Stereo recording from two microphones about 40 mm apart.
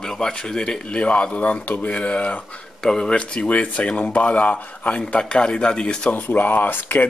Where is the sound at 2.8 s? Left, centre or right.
Centre; by 5.0 s left.